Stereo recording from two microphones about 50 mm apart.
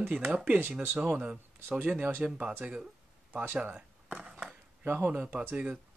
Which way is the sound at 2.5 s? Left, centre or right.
Right.